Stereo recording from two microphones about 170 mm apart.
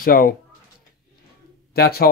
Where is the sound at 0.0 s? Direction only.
60° left (ahead or behind).